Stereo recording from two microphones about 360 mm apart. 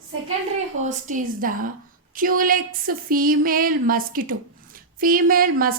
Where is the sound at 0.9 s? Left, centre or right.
Right.